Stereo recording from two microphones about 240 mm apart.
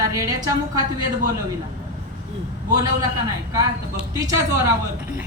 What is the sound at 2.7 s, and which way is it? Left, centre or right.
Speech, centre.